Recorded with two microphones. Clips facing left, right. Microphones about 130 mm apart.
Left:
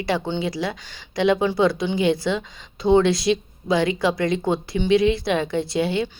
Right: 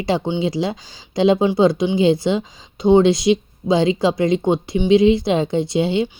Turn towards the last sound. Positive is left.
turn(degrees=-25)  # may be behind; listen again after turning